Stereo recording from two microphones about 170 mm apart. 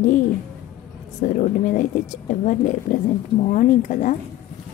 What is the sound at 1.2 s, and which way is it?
A woman's voice, 45° left (ahead or behind).